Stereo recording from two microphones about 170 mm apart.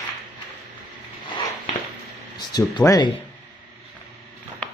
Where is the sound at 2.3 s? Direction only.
25° left (ahead or behind).